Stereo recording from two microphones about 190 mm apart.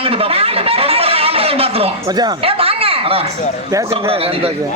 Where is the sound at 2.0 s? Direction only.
20° right (ahead or behind).